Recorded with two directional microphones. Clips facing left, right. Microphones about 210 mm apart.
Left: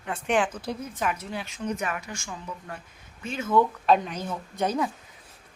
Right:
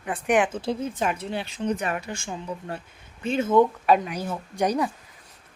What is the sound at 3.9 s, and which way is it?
Speech, 5° right (ahead or behind).